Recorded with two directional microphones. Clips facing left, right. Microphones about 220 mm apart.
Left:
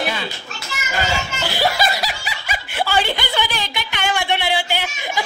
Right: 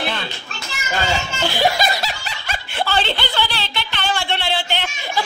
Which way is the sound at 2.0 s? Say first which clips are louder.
Left 1 dB; 10° left (ahead or behind).